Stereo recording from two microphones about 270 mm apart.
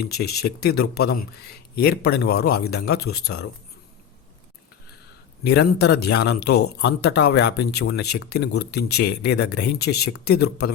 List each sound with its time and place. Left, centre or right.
0.1 s a man's voice: left
5.4 s a man's voice: left